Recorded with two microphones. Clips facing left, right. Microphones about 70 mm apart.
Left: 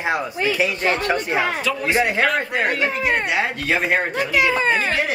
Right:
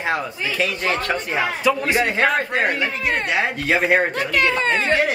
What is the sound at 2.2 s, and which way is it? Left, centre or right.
Speech, centre.